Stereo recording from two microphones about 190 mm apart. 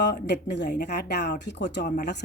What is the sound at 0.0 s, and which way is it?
Speech, 65° left (ahead or behind).